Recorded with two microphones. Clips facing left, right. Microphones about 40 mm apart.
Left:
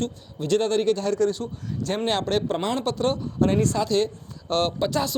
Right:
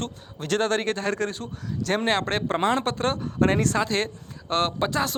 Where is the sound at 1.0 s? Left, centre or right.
Right.